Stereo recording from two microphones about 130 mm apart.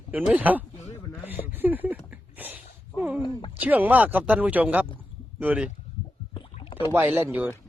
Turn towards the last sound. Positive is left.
turn(degrees=-15)  # may be behind; listen again after turning